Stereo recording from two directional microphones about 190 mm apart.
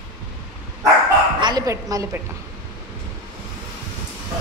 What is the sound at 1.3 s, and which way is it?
Speech, 20° right (ahead or behind).